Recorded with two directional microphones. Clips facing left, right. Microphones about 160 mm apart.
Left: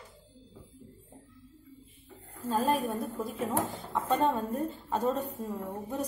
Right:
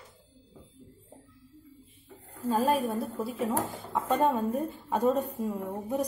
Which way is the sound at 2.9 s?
5° right (ahead or behind).